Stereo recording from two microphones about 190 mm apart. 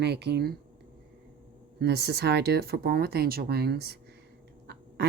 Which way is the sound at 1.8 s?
60° right (ahead or behind).